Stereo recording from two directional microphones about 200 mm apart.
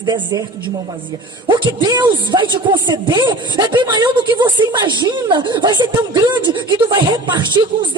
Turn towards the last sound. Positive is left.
turn(degrees=-20)  # may be behind; listen again after turning